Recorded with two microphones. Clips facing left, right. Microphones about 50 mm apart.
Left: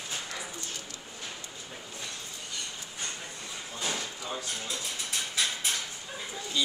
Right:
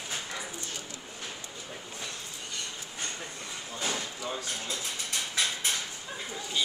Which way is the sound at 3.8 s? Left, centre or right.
Centre.